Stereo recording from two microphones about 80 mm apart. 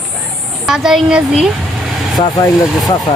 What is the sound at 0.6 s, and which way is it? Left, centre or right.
Speech, centre.